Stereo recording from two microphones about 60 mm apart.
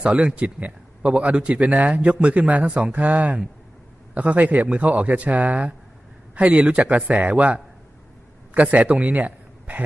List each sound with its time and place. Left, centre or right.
0.0 s a man's voice: centre